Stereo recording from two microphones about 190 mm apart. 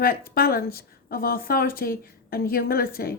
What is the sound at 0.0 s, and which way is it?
Speech, 50° left (ahead or behind).